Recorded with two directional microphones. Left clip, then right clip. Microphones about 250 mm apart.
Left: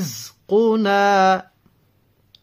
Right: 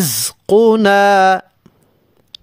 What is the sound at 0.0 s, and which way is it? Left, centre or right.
Music, right.